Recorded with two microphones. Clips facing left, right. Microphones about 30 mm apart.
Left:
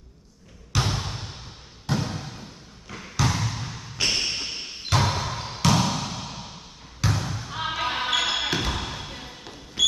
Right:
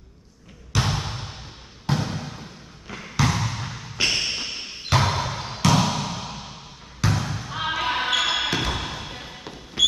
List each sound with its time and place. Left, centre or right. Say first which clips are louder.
0.7 s basketball bounce: right 2 dB; centre
1.9 s a sound: right 2 dB; centre
2.9 s basketball bounce: right 2 dB; centre